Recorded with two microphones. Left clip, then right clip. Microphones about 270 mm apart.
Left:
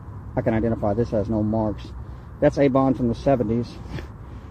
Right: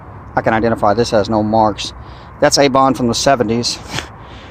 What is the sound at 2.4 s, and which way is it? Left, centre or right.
Speech, centre.